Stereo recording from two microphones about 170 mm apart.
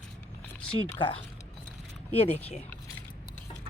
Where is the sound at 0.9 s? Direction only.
30° left (ahead or behind).